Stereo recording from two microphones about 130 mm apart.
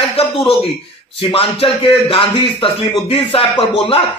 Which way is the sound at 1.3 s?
45° left (ahead or behind).